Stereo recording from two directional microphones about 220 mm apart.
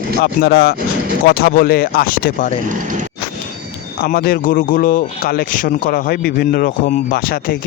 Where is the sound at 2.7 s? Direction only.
35° right (ahead or behind).